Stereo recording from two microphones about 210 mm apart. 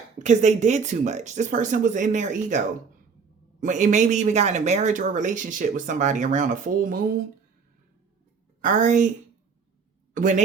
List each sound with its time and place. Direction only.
0.2 s speech: 35° right (ahead or behind)
3.6 s speech: 35° right (ahead or behind)
8.6 s speech: 35° right (ahead or behind)
10.2 s speech: 35° right (ahead or behind)